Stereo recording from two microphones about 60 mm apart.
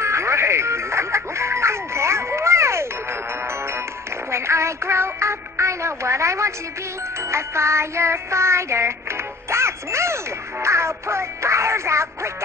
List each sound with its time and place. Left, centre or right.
0.0 s music: right